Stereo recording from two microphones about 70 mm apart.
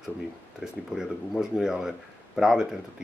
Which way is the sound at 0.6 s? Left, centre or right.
Centre.